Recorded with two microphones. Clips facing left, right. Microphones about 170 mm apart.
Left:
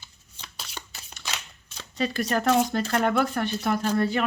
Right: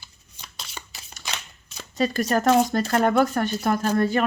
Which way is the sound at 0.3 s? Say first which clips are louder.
Even; 5° right (ahead or behind).